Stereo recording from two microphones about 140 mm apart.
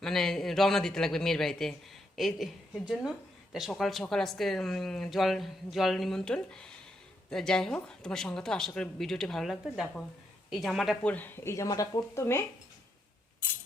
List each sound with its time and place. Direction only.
0.0 s speech: 5° left (ahead or behind)
11.1 s speech: 15° left (ahead or behind)